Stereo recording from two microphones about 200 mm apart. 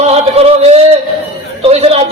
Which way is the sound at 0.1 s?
30° right (ahead or behind).